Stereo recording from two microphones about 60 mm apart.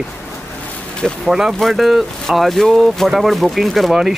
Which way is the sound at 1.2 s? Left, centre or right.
Centre.